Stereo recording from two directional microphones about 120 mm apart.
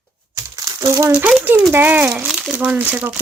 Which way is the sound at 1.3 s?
10° right (ahead or behind).